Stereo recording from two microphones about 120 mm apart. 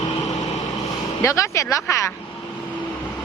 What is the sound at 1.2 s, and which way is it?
Speech, 25° left (ahead or behind).